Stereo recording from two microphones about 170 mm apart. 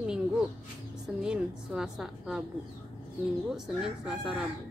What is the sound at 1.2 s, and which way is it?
A woman's voice, 5° right (ahead or behind).